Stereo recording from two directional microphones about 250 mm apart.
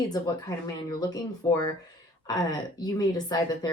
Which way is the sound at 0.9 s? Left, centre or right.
Centre.